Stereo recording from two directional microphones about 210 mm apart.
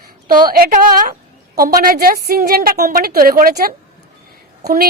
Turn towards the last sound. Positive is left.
turn(degrees=-45)  # may be behind; listen again after turning